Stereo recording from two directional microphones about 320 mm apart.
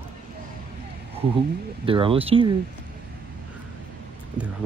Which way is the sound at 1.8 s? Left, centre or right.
Centre.